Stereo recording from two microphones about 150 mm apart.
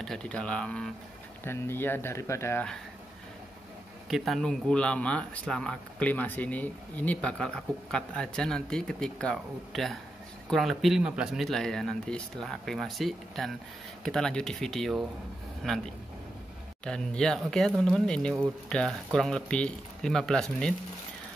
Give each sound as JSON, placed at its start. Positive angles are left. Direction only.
{"t": 0.0, "sound": "speech", "side_deg": 5}
{"t": 4.1, "sound": "speech", "side_deg": 0}